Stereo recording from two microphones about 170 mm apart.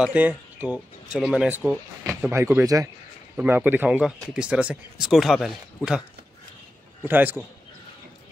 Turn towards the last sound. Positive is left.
turn(degrees=-10)  # may be behind; listen again after turning